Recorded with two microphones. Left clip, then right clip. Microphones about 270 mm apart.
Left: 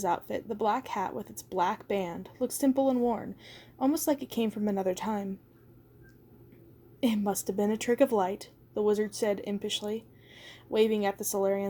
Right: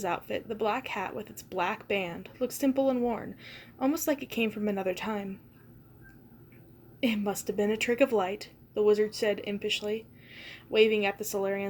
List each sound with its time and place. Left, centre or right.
0.2 s a woman's voice: left
7.0 s a woman's voice: left
10.4 s a sound: left
11.3 s speech: left